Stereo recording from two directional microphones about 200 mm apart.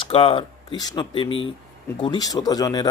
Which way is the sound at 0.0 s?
25° left (ahead or behind).